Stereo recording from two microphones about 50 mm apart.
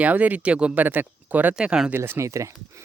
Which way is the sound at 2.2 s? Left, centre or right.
Right.